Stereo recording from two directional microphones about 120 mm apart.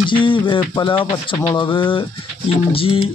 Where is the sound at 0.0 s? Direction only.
45° left (ahead or behind).